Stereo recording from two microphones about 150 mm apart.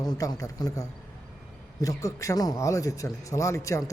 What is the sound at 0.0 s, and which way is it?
Speech, 25° left (ahead or behind).